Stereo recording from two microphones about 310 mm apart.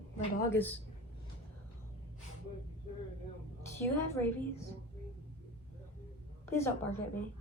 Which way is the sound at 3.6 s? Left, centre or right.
Centre.